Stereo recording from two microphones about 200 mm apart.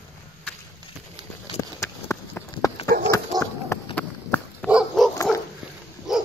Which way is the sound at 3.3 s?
20° right (ahead or behind).